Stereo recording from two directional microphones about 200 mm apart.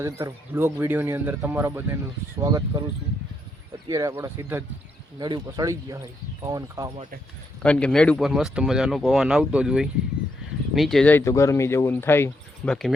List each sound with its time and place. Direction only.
0.0 s speech: 10° right (ahead or behind)
3.8 s speech: 15° right (ahead or behind)
7.6 s speech: 5° left (ahead or behind)